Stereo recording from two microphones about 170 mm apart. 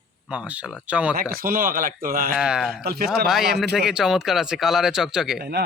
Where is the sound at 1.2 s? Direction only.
60° right (ahead or behind).